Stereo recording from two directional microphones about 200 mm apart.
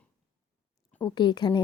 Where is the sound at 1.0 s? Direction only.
20° left (ahead or behind).